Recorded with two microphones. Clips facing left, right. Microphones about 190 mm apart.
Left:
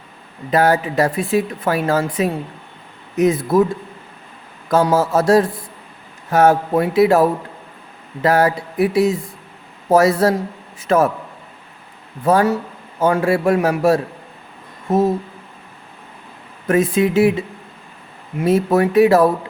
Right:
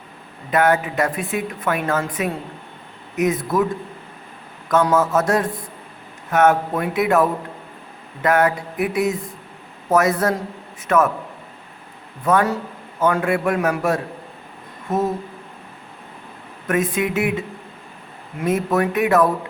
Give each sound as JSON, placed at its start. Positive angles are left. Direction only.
{"t": 0.5, "sound": "speech", "side_deg": 35}
{"t": 4.7, "sound": "speech", "side_deg": 30}
{"t": 12.2, "sound": "a man's voice", "side_deg": 30}
{"t": 16.6, "sound": "speech", "side_deg": 30}
{"t": 18.4, "sound": "speech", "side_deg": 30}